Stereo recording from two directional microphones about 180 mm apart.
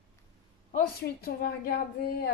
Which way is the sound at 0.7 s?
60° left (ahead or behind).